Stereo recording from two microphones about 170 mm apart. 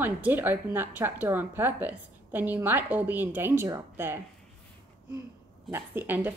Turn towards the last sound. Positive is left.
turn(degrees=-10)  # may be behind; listen again after turning